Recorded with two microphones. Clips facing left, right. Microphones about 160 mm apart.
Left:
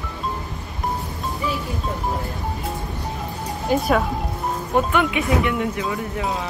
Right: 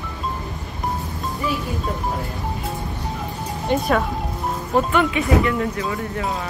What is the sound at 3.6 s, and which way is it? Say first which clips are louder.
Speech: even; centre (ahead or behind).